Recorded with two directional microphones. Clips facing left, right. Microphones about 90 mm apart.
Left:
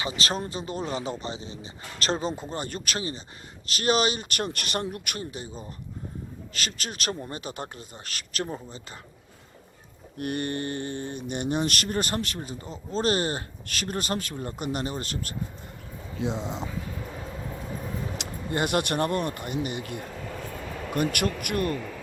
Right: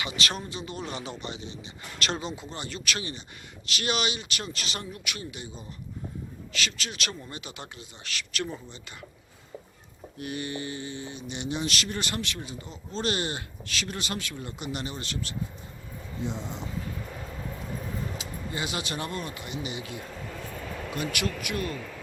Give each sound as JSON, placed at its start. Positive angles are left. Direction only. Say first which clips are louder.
{"t": 0.0, "sound": "a man's voice", "louder": "left 3 dB", "side_deg": 35}
{"t": 3.7, "sound": "mantra", "louder": "left 5 dB", "side_deg": 40}
{"t": 10.2, "sound": "mantra", "louder": "left 5 dB", "side_deg": 55}
{"t": 16.1, "sound": "speech", "louder": "left 4 dB", "side_deg": 90}
{"t": 18.2, "sound": "speech", "louder": "left 6 dB", "side_deg": 55}
{"t": 20.9, "sound": "mantra", "louder": "left 5 dB", "side_deg": 50}